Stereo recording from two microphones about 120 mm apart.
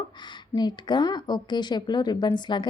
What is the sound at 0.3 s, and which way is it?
A woman's voice, 40° left (ahead or behind).